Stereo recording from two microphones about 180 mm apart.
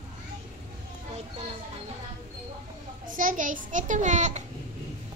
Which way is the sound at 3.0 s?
50° right (ahead or behind).